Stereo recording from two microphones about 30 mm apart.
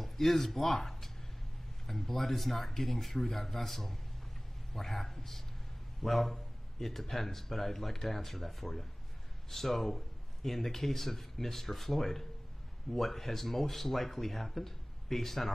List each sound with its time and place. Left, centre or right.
0.0 s speech: centre